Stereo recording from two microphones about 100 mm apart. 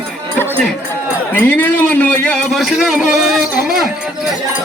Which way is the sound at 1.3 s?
15° left (ahead or behind).